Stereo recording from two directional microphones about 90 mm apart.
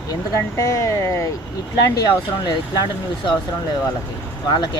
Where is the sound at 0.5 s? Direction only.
35° left (ahead or behind).